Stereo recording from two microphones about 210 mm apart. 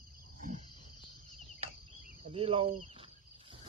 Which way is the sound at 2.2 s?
30° right (ahead or behind).